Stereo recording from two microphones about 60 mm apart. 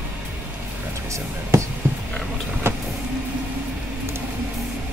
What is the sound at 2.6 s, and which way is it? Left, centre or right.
Vehicle, right.